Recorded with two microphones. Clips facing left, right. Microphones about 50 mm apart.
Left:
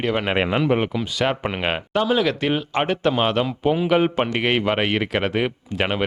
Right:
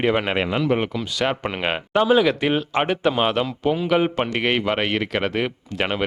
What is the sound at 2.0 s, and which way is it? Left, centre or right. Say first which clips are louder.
Speech: right 3 dB; centre.